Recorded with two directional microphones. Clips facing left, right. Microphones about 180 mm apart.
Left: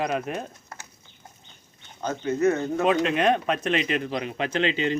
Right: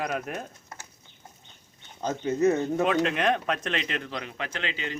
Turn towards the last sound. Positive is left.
turn(degrees=25)  # may be behind; listen again after turning